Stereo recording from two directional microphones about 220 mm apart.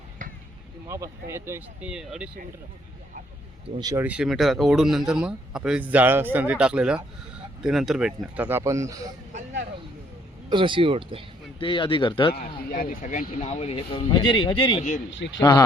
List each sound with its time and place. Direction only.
0.9 s speech: 15° right (ahead or behind)
3.8 s speech: 20° right (ahead or behind)
4.0 s a man's voice: 5° right (ahead or behind)
10.5 s speech: 20° right (ahead or behind)
11.6 s speech: 20° left (ahead or behind)
12.3 s speech: 40° left (ahead or behind); by 15.6 s 20° left (ahead or behind)